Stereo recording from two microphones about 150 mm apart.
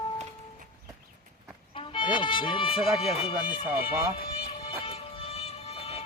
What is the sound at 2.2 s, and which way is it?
Speech, 30° left (ahead or behind).